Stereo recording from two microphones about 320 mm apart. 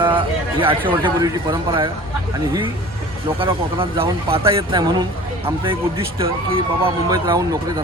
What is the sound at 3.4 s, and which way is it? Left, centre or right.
Speech, centre.